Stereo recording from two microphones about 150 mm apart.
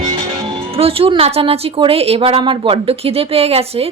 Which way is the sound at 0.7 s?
40° right (ahead or behind).